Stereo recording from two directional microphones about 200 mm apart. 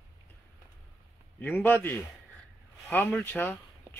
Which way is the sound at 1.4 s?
10° left (ahead or behind).